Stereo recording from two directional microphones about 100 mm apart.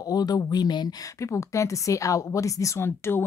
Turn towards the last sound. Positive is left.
turn(degrees=25)  # may be behind; listen again after turning